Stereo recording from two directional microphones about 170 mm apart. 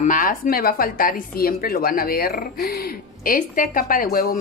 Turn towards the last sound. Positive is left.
turn(degrees=60)  # may be behind; listen again after turning